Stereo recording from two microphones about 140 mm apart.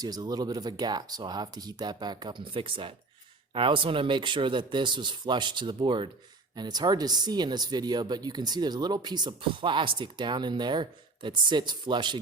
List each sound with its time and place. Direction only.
0.0 s speech: 25° right (ahead or behind)